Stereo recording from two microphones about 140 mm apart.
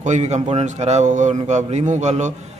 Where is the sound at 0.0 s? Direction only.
55° right (ahead or behind).